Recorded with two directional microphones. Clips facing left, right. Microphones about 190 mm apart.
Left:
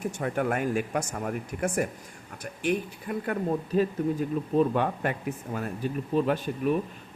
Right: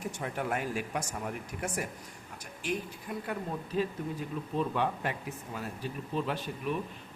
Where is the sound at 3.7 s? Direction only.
50° left (ahead or behind).